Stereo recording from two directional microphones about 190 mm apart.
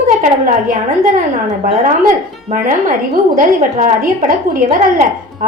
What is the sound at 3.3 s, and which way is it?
A woman's voice, 45° right (ahead or behind).